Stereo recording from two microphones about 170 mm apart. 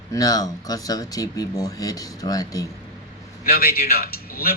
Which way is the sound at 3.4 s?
65° left (ahead or behind).